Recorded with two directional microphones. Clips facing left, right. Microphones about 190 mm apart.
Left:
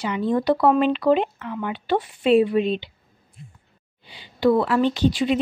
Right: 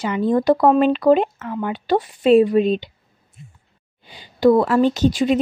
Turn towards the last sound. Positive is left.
turn(degrees=-45)  # may be behind; listen again after turning